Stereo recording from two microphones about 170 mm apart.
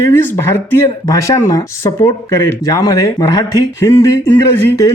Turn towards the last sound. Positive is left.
turn(degrees=15)  # may be behind; listen again after turning